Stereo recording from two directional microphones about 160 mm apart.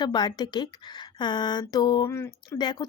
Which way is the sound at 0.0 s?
25° left (ahead or behind).